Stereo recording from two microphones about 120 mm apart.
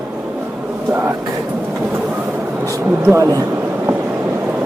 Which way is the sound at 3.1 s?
30° right (ahead or behind).